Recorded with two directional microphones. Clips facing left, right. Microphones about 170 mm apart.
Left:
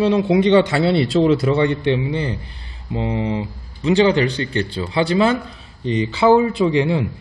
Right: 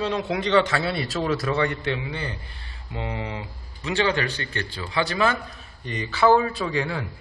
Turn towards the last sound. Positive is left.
turn(degrees=25)  # may be behind; listen again after turning